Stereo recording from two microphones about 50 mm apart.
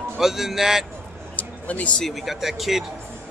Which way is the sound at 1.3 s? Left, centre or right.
Left.